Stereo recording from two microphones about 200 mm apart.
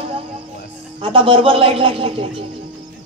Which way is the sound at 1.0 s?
25° right (ahead or behind).